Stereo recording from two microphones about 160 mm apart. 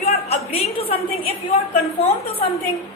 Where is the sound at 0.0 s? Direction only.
40° left (ahead or behind).